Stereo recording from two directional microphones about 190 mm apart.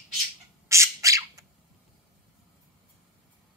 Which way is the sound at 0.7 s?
15° right (ahead or behind).